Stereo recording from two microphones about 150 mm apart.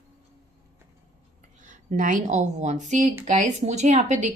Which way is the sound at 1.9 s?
55° right (ahead or behind).